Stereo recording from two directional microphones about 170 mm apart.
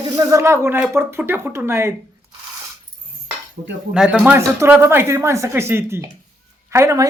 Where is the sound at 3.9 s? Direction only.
5° right (ahead or behind).